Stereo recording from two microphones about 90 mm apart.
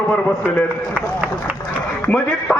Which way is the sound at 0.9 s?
15° right (ahead or behind).